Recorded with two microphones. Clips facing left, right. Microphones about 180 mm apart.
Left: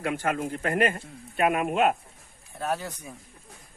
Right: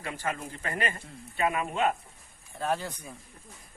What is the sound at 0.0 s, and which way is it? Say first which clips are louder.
Speech: left 7 dB; 60° left (ahead or behind).